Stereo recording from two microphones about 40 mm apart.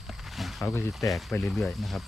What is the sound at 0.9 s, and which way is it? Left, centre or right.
Speech, centre.